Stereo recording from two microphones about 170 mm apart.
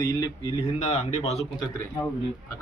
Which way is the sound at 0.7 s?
45° left (ahead or behind).